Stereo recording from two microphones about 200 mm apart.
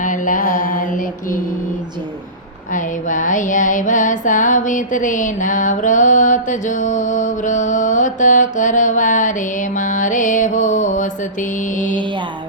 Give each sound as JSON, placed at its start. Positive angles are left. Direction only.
{"t": 0.0, "sound": "mantra", "side_deg": 40}
{"t": 2.7, "sound": "music", "side_deg": 40}